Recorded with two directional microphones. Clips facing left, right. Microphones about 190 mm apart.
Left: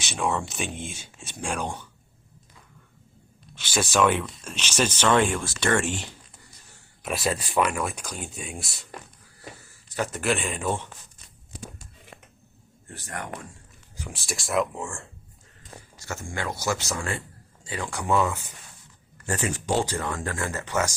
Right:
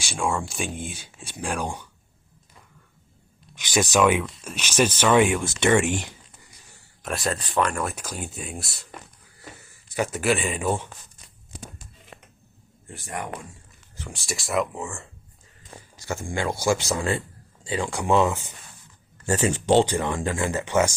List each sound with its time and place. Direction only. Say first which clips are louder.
0.1 s speech: right 1 dB; centre (ahead or behind)
3.5 s speech: right 3 dB; 15° right (ahead or behind)
4.0 s speech: right 2 dB; 5° right (ahead or behind)
7.0 s speech: even; centre (ahead or behind)
9.9 s speech: right 3 dB; 10° right (ahead or behind)
12.9 s speech: right 3 dB; 15° right (ahead or behind)
13.9 s speech: right 1 dB; 5° left (ahead or behind)
16.3 s speech: right 5 dB; 25° right (ahead or behind)
17.1 s a sound: right 6 dB; 30° right (ahead or behind)
17.7 s speech: right 3 dB; 20° right (ahead or behind)